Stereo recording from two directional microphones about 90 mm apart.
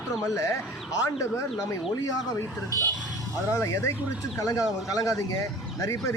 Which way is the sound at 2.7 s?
35° left (ahead or behind).